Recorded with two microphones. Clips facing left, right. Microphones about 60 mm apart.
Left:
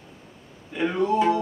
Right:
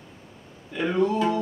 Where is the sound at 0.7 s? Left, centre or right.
Left.